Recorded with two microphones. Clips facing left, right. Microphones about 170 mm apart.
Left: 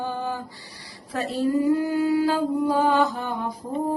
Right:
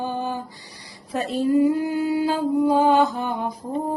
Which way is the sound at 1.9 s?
20° right (ahead or behind).